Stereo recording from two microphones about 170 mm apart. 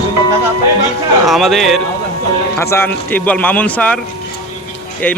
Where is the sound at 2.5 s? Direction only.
15° left (ahead or behind).